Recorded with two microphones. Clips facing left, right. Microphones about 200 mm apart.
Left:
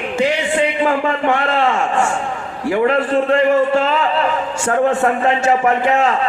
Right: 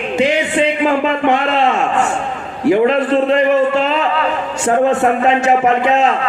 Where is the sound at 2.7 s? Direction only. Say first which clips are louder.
Right 3 dB; 20° right (ahead or behind).